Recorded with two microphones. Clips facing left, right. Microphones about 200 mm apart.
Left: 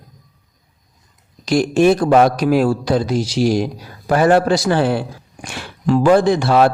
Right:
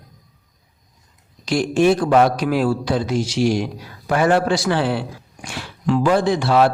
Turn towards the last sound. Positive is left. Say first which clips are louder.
# left 2 dB
turn(degrees=45)  # may be behind; listen again after turning